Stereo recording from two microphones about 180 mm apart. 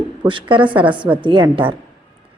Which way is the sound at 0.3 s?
25° right (ahead or behind).